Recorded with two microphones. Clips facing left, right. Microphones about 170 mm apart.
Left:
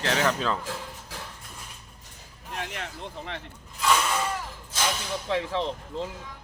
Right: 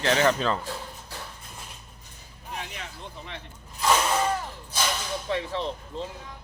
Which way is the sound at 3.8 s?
25° right (ahead or behind).